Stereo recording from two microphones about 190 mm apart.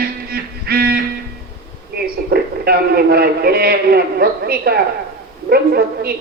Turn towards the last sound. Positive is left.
turn(degrees=-55)  # may be behind; listen again after turning